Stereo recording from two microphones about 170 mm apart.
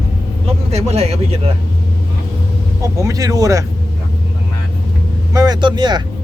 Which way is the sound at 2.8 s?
20° right (ahead or behind).